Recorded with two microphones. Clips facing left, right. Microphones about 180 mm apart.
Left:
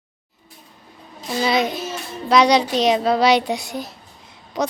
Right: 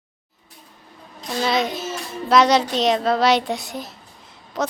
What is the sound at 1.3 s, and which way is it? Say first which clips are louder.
A child's voice: left 2 dB; centre (ahead or behind).